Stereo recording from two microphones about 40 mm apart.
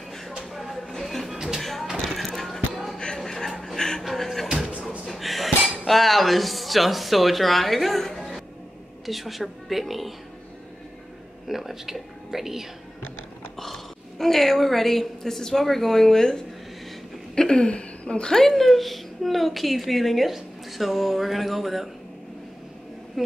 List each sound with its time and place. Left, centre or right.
0.4 s a sound: centre
1.0 s music: centre
3.2 s a sound: centre
3.7 s music: centre
4.0 s music: centre
5.0 s a woman's voice: centre
11.4 s speech: centre
13.6 s a woman's voice: centre
17.4 s a sound: centre
17.6 s a woman's voice: left
18.3 s a woman's voice: centre
23.2 s a sound: centre